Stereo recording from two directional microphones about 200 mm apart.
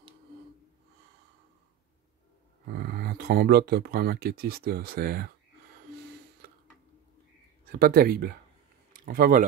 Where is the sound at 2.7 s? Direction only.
55° right (ahead or behind).